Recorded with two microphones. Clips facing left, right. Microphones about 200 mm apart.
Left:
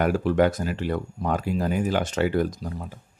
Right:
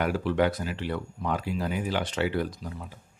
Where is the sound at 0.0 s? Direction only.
45° left (ahead or behind).